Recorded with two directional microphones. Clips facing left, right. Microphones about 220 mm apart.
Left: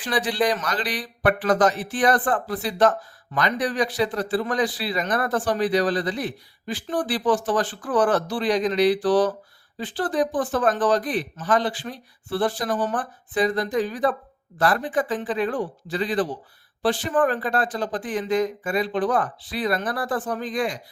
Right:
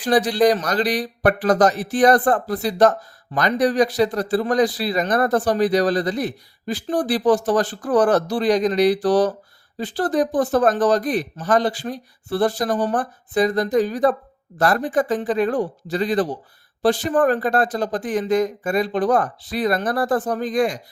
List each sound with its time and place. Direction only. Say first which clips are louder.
0.0 s speech: right 7 dB; 40° right (ahead or behind)